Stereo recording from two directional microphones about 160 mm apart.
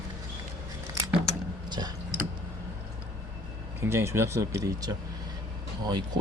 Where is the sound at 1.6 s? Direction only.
25° right (ahead or behind).